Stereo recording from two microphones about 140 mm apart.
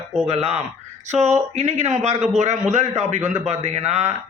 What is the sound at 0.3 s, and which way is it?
A man's voice, 50° right (ahead or behind).